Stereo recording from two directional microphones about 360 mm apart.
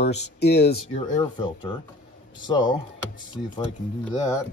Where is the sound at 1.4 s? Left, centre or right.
Centre.